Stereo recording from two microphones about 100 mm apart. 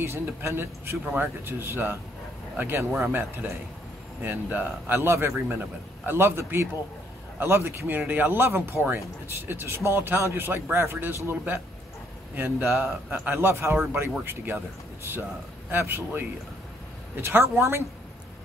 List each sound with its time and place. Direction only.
0.0 s speech: 25° right (ahead or behind)
15.7 s speech: 20° right (ahead or behind)